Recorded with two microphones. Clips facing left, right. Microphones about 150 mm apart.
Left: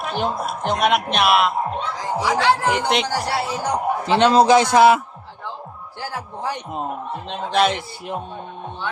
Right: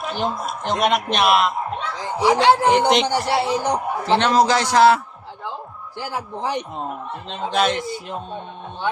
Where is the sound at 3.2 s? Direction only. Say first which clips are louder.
Right 3 dB; 25° right (ahead or behind).